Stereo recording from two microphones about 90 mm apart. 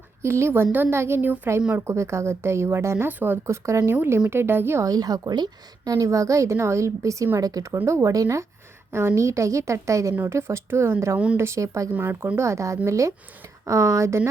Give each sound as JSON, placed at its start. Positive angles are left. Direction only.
{"t": 0.2, "sound": "speech", "side_deg": -30}
{"t": 3.4, "sound": "a woman's voice", "side_deg": -35}
{"t": 4.9, "sound": "a woman's voice", "side_deg": -45}